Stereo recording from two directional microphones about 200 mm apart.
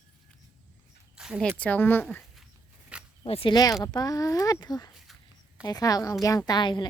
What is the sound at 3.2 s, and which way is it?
A woman's voice, 25° left (ahead or behind).